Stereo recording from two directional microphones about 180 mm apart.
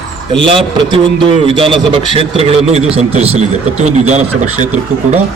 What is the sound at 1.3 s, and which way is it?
A man's voice, 30° right (ahead or behind).